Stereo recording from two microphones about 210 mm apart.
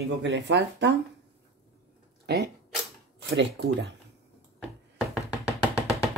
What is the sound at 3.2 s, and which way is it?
Speech, 55° right (ahead or behind).